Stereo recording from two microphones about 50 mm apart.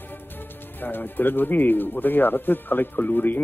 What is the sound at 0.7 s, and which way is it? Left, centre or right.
Speech, left.